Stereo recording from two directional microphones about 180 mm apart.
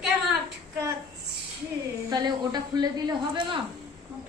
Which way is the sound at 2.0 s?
20° right (ahead or behind).